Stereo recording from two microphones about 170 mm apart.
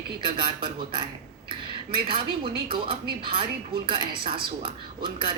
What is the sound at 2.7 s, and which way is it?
A woman's voice, 30° right (ahead or behind).